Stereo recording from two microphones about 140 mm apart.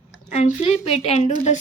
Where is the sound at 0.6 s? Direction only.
45° left (ahead or behind).